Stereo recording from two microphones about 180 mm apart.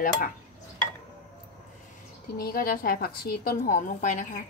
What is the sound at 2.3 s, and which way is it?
A woman's voice, 55° left (ahead or behind).